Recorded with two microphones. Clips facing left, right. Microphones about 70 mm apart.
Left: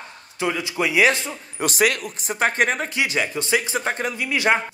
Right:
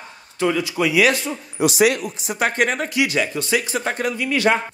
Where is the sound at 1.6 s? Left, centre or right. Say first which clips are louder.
Right 4 dB; left.